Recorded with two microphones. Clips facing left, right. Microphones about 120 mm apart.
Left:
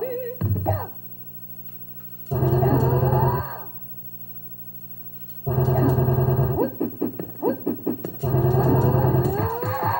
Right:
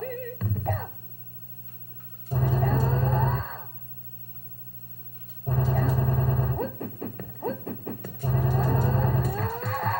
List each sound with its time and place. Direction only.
0.0 s music: 20° left (ahead or behind)
0.4 s music: 30° left (ahead or behind)
2.2 s music: 35° left (ahead or behind)
2.5 s a sound: 20° left (ahead or behind)
5.6 s effects unit: 30° left (ahead or behind)
8.8 s a sound: 20° left (ahead or behind)
9.2 s cattle: 25° left (ahead or behind)